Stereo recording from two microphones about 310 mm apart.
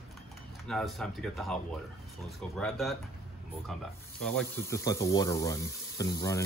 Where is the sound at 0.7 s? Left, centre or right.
Centre.